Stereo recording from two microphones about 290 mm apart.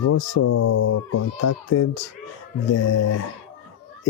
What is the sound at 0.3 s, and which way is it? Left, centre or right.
Speech, left.